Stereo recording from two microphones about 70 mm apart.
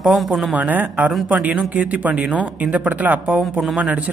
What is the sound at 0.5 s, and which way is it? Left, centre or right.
Speech, right.